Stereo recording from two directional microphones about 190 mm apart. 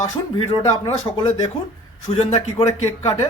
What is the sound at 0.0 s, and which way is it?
A man's voice, 30° left (ahead or behind).